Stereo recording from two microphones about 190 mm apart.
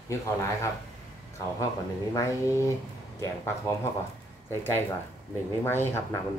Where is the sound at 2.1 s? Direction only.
15° left (ahead or behind).